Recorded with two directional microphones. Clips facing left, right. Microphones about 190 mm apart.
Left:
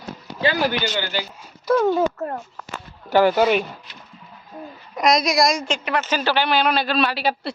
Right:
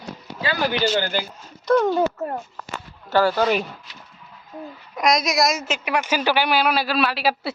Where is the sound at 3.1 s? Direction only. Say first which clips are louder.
Left 3 dB; 15° left (ahead or behind).